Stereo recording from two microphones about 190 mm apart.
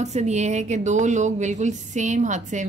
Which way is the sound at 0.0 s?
35° right (ahead or behind).